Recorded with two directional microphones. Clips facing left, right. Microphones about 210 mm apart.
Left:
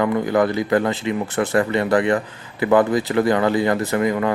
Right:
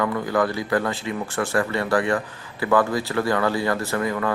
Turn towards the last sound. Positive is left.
turn(degrees=20)  # may be behind; listen again after turning